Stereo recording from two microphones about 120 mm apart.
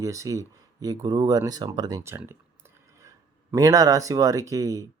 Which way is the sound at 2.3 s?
20° right (ahead or behind).